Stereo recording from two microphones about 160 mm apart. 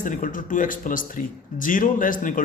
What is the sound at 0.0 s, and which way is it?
A man's voice, 55° left (ahead or behind).